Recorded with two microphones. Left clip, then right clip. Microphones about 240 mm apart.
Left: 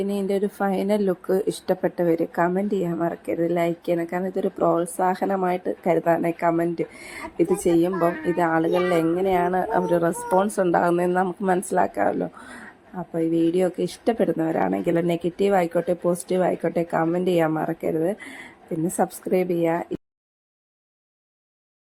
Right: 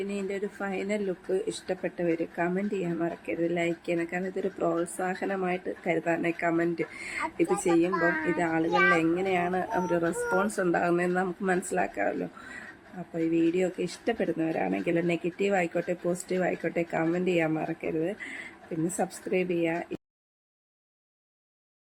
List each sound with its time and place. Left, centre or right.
0.1 s speech: left
13.1 s speech: centre